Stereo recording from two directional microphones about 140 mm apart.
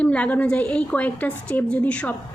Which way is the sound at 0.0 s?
10° left (ahead or behind).